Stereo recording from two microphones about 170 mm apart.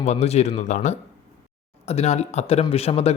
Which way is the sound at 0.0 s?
40° left (ahead or behind).